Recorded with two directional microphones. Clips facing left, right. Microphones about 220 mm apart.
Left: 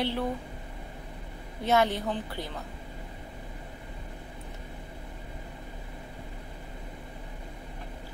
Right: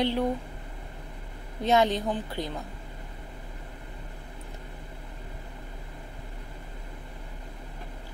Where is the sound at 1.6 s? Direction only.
15° right (ahead or behind).